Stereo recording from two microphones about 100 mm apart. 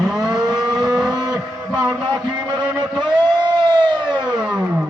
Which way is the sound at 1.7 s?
35° right (ahead or behind).